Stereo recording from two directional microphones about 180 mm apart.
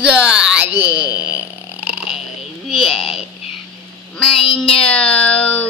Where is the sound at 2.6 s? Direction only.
Centre (ahead or behind).